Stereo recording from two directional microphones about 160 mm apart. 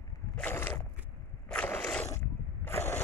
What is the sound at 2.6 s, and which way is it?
Boat, 15° left (ahead or behind).